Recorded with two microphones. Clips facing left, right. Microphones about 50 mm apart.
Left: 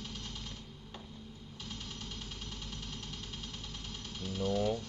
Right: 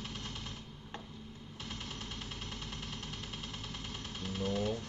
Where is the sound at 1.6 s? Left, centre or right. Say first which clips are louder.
Right 1 dB; right.